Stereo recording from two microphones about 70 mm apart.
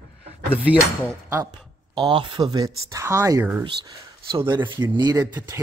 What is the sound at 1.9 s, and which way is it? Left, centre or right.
Speech, right.